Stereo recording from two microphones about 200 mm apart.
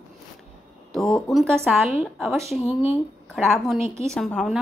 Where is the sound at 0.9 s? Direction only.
Centre (ahead or behind).